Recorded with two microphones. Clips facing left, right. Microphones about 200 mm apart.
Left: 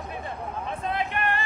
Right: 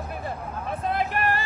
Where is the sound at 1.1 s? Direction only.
40° right (ahead or behind).